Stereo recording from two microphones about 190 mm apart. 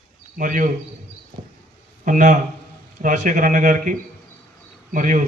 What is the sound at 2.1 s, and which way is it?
A man's voice, 40° right (ahead or behind).